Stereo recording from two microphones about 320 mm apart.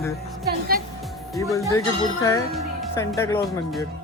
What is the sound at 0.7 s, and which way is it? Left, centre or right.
Music, right.